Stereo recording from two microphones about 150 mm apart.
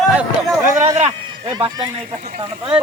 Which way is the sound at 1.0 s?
35° right (ahead or behind).